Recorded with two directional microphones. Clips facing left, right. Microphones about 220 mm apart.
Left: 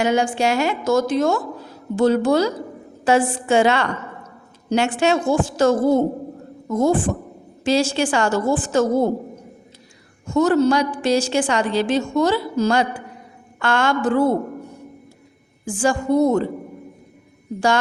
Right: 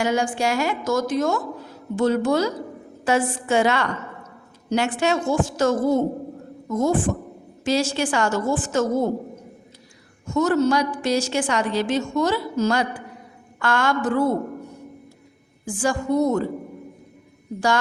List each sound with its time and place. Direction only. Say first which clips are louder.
0.0 s a woman's voice: left 3 dB; 20° left (ahead or behind)
10.2 s a woman's voice: left 3 dB; 30° left (ahead or behind)
15.6 s a woman's voice: left 3 dB; 25° left (ahead or behind)